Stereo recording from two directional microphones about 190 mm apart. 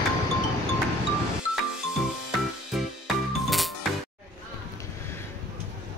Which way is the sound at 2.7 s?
Centre (ahead or behind).